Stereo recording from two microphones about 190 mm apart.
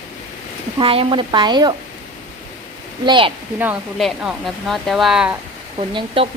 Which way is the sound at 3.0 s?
25° right (ahead or behind).